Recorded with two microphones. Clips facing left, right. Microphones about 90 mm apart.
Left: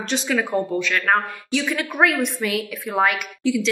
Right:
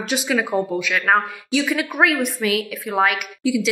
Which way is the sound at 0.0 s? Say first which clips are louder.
Right 1 dB; 5° right (ahead or behind).